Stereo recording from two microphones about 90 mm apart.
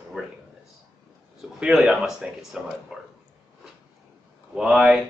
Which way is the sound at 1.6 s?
5° right (ahead or behind).